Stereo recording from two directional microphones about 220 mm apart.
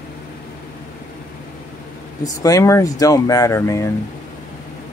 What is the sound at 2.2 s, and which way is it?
Speech, 15° left (ahead or behind).